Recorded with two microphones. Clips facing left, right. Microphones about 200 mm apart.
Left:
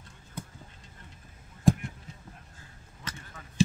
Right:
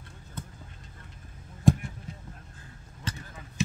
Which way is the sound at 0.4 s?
10° left (ahead or behind).